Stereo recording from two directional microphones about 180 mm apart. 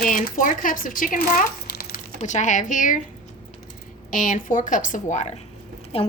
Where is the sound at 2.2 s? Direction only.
40° left (ahead or behind).